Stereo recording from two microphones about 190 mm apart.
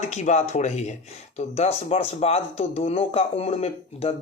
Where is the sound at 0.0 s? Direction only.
35° left (ahead or behind).